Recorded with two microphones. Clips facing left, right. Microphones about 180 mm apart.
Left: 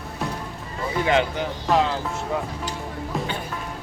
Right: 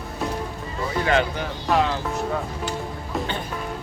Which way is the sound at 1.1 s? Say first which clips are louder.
Left 1 dB; 20° left (ahead or behind).